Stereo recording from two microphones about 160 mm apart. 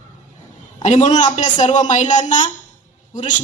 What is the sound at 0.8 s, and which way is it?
A woman's voice, 45° left (ahead or behind).